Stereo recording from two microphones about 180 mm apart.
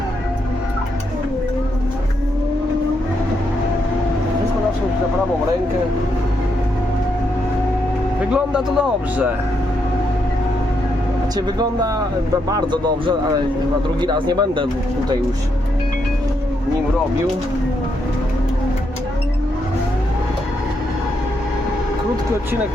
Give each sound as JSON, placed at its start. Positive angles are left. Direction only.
{"t": 8.3, "sound": "speech", "side_deg": -5}
{"t": 11.3, "sound": "a man's voice", "side_deg": -20}